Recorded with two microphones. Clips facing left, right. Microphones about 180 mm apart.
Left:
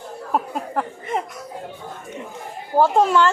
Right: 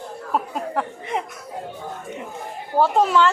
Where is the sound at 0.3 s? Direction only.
Centre (ahead or behind).